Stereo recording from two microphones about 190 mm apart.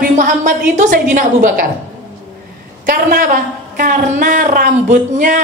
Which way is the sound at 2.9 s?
50° right (ahead or behind).